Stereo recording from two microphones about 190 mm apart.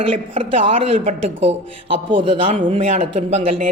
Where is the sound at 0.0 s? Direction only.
30° right (ahead or behind).